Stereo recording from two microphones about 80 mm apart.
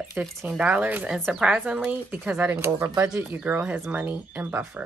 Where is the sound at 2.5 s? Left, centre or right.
Right.